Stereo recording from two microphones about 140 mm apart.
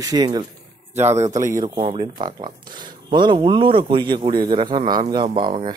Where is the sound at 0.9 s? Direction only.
20° right (ahead or behind).